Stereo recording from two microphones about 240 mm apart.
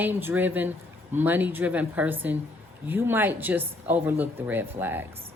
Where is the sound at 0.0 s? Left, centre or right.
Centre.